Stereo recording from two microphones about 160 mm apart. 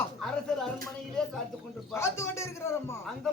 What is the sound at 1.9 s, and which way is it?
A man's voice, 15° left (ahead or behind).